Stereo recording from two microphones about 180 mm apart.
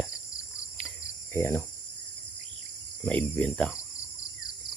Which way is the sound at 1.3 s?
15° left (ahead or behind).